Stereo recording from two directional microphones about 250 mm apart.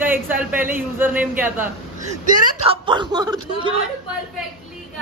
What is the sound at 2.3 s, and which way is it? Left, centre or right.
Speech, right.